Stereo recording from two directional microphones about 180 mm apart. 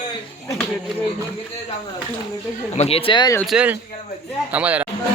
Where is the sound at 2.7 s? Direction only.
35° left (ahead or behind).